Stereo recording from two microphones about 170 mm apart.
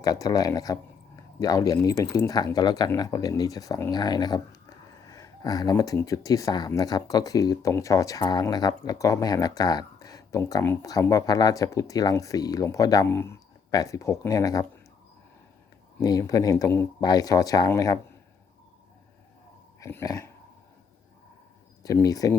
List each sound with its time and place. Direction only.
0.0 s speech: 20° left (ahead or behind)
16.0 s speech: 20° left (ahead or behind)
19.8 s dog: 20° left (ahead or behind)
21.8 s speech: 20° left (ahead or behind)